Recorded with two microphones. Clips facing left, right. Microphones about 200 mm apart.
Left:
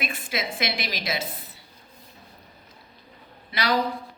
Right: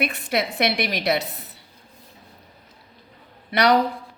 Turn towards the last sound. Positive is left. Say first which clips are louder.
# right 8 dB
turn(degrees=-65)  # may be behind; listen again after turning